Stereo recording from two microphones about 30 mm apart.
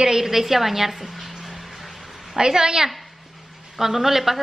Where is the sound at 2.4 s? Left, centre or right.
Right.